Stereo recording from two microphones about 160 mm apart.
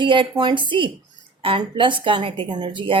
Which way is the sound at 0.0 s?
30° right (ahead or behind).